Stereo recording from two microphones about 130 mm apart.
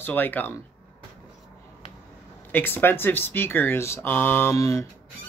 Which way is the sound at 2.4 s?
15° left (ahead or behind).